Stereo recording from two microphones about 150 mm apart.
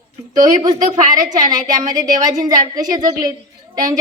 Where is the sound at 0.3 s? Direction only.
25° right (ahead or behind).